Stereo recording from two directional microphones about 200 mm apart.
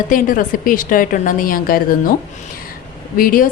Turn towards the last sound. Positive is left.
turn(degrees=45)  # may be behind; listen again after turning